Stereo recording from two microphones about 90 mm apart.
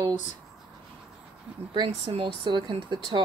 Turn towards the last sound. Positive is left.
turn(degrees=-60)  # may be behind; listen again after turning